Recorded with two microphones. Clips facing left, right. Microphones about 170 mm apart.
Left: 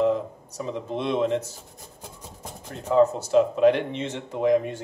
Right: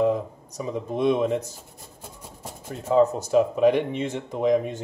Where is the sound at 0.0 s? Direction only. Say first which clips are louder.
Even; 15° right (ahead or behind).